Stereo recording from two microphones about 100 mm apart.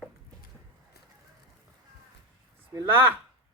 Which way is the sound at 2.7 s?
25° right (ahead or behind).